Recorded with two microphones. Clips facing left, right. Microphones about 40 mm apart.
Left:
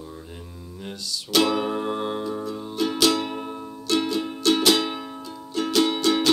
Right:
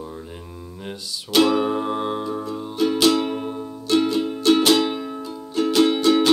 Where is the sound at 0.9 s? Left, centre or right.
Centre.